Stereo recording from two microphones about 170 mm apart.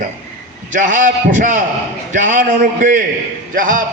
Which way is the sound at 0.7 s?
50° right (ahead or behind).